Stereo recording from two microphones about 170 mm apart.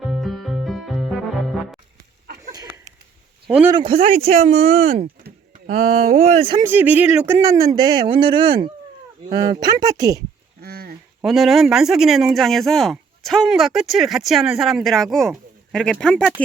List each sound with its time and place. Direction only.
0.1 s music: centre (ahead or behind)
2.4 s a sound: 20° right (ahead or behind)
3.4 s speech: 5° right (ahead or behind)
3.7 s speech: 30° right (ahead or behind)
5.6 s speech: 45° right (ahead or behind)
6.6 s speech: 10° right (ahead or behind)
10.6 s a sound: 65° right (ahead or behind)
11.2 s speech: centre (ahead or behind)